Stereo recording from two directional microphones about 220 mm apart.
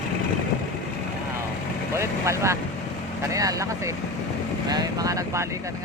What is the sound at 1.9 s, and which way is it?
Speech, 15° right (ahead or behind).